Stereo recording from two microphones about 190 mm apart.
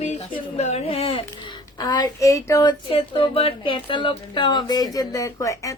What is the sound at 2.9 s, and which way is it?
Speech, 30° left (ahead or behind).